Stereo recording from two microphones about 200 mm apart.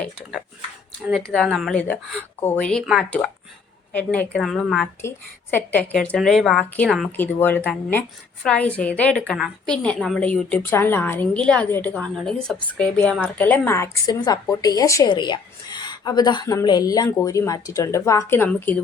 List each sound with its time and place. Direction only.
0.0 s a woman's voice: centre (ahead or behind)